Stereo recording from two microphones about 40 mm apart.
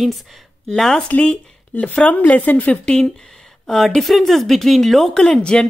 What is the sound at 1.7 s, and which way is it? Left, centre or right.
Speech, left.